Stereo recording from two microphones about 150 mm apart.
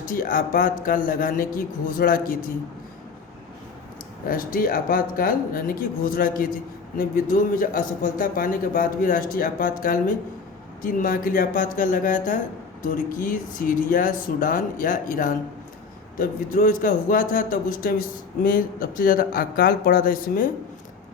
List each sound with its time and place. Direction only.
0.0 s a man's voice: 65° left (ahead or behind)
4.3 s a man's voice: 65° left (ahead or behind)